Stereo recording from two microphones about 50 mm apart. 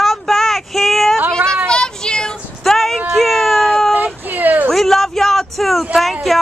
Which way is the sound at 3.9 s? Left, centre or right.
Right.